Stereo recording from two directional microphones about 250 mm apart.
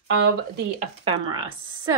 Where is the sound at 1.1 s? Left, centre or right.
Centre.